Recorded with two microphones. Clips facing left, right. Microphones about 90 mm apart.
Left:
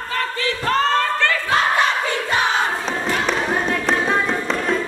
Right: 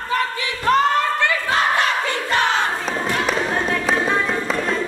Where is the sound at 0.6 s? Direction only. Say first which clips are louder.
Right 2 dB; 15° right (ahead or behind).